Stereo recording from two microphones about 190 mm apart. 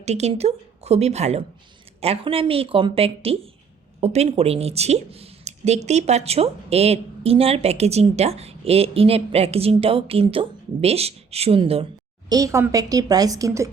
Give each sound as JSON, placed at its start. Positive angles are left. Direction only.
{"t": 0.0, "sound": "speech", "side_deg": -35}
{"t": 12.3, "sound": "a woman's voice", "side_deg": -15}